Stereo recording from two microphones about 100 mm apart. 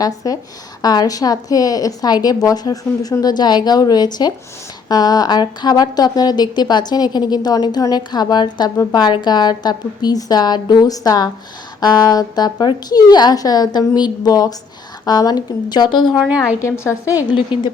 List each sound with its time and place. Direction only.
0.2 s a woman's voice: 35° left (ahead or behind); by 16.1 s 50° left (ahead or behind)
16.2 s a woman's voice: 10° right (ahead or behind)
16.6 s a woman's voice: 30° left (ahead or behind)
17.2 s a woman's voice: 55° left (ahead or behind)